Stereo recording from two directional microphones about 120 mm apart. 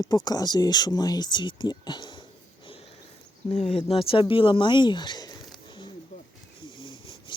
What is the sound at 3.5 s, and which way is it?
Speech, 60° left (ahead or behind).